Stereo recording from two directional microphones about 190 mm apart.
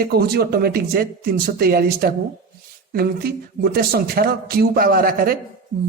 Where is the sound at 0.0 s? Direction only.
55° right (ahead or behind).